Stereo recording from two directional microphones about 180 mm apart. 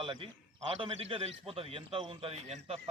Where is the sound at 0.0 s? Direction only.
25° right (ahead or behind).